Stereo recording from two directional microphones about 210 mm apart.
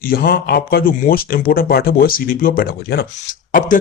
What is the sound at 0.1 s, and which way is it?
Speech, 45° left (ahead or behind).